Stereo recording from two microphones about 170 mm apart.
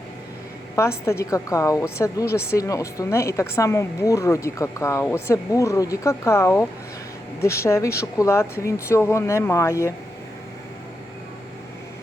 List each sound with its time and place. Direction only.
0.8 s a woman's voice: 15° left (ahead or behind)